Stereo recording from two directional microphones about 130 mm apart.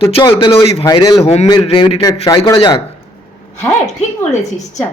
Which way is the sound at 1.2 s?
50° left (ahead or behind).